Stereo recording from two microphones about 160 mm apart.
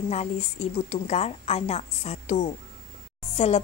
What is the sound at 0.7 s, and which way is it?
A woman's voice, 45° left (ahead or behind).